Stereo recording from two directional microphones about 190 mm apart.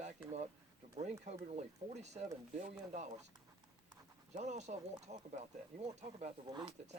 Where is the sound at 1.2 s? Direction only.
35° right (ahead or behind).